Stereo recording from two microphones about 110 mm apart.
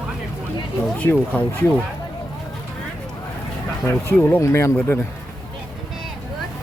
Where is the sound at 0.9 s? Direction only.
15° left (ahead or behind).